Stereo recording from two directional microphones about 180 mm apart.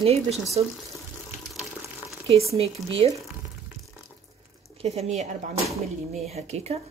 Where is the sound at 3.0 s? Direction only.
35° right (ahead or behind).